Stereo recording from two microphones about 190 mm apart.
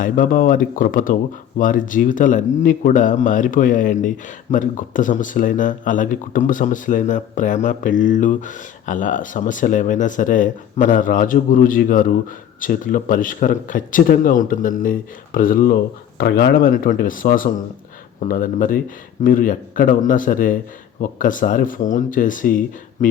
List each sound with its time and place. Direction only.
0.0 s speech: 45° left (ahead or behind)